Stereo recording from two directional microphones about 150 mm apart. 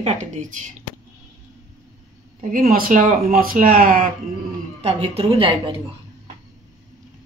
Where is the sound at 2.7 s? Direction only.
70° right (ahead or behind).